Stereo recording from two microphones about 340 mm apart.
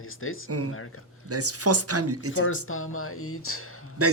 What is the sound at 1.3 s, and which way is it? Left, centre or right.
Speech, right.